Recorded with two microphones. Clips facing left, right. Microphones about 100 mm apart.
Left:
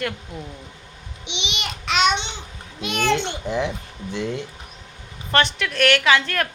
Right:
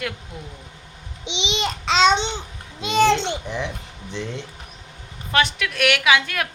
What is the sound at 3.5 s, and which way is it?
Speech, 15° left (ahead or behind).